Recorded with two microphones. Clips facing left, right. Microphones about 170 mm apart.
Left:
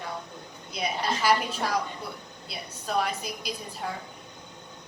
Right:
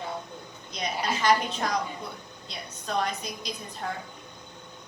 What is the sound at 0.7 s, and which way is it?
A woman's voice, 5° left (ahead or behind).